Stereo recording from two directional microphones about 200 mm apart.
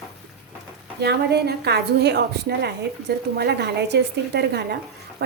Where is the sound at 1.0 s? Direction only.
55° right (ahead or behind).